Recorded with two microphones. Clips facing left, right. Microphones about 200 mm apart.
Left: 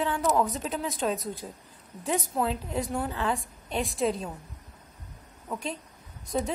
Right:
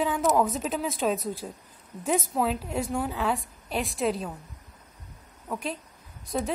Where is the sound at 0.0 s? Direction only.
15° right (ahead or behind).